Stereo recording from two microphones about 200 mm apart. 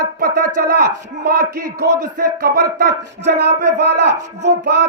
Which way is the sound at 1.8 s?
50° right (ahead or behind).